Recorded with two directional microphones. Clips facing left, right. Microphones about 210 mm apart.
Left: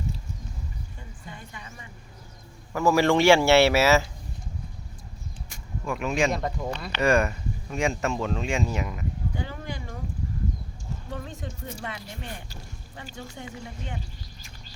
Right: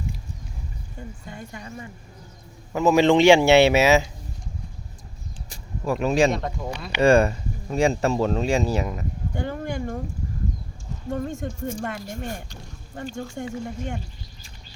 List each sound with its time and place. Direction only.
0.9 s speech: 45° right (ahead or behind)
2.7 s speech: 20° right (ahead or behind)
5.5 s a sound: 35° right (ahead or behind)
6.3 s speech: centre (ahead or behind)
7.0 s speech: 30° right (ahead or behind)
9.4 s speech: 50° right (ahead or behind)
11.1 s speech: 45° right (ahead or behind)